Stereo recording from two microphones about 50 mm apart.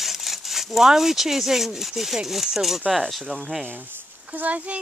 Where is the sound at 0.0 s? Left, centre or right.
Centre.